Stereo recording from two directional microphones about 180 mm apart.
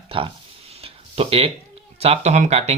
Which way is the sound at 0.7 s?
35° right (ahead or behind).